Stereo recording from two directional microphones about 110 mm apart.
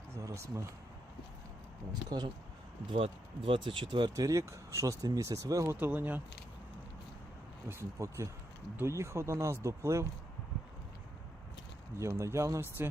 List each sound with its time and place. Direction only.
0.2 s speech: 30° right (ahead or behind)
2.0 s speech: 40° right (ahead or behind)
2.9 s speech: 60° right (ahead or behind)
4.1 s speech: 30° right (ahead or behind)
5.7 s speech: 15° right (ahead or behind)
7.7 s speech: 25° right (ahead or behind)
11.9 s speech: 25° right (ahead or behind)